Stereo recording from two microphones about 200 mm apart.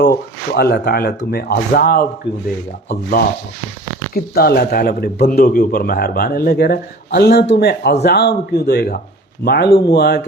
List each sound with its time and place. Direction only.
0.0 s a man's voice: 55° left (ahead or behind)
4.1 s a man's voice: 50° left (ahead or behind)